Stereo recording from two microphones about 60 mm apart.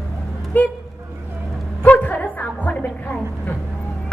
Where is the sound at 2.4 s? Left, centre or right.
Left.